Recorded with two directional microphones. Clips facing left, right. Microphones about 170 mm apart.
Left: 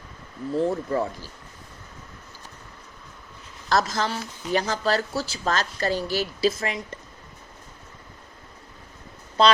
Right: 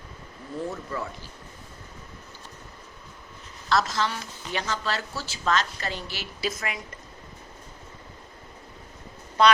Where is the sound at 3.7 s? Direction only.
40° left (ahead or behind).